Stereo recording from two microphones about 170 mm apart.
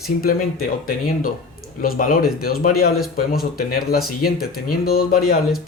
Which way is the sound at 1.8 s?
55° left (ahead or behind).